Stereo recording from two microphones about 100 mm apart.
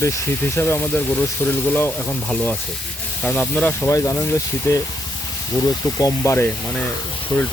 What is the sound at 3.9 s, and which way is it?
Speech, 35° left (ahead or behind).